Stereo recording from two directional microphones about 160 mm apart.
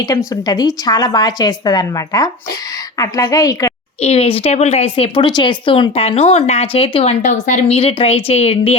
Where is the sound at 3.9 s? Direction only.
40° left (ahead or behind).